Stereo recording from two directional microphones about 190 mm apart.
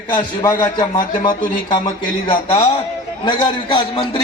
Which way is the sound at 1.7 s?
25° left (ahead or behind).